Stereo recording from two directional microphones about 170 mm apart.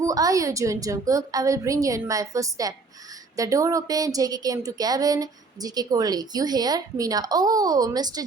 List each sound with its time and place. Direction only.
0.0 s speech: 20° right (ahead or behind)